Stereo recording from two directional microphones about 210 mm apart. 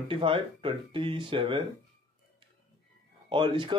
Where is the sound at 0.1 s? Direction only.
25° right (ahead or behind).